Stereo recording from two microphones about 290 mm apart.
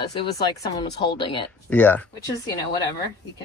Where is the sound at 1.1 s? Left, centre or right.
Centre.